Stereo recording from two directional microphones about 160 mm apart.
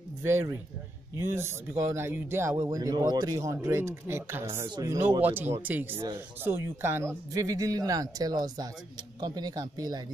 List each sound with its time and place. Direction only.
0.2 s speech: 15° right (ahead or behind)
5.2 s speech: 10° right (ahead or behind)